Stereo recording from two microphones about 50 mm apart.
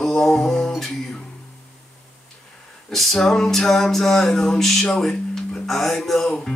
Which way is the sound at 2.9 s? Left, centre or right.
Centre.